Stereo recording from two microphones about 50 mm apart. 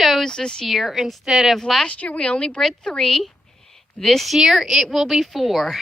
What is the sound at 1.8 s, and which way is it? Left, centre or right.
Speech, left.